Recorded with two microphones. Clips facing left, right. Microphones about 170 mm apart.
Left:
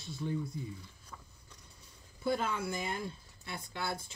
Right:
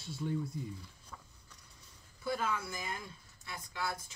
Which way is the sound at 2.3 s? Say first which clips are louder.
Left 3 dB; 30° left (ahead or behind).